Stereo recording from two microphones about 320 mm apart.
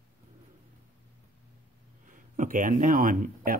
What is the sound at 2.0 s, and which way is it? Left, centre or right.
Speech, right.